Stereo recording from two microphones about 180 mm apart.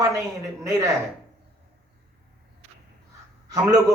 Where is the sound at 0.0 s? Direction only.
15° right (ahead or behind).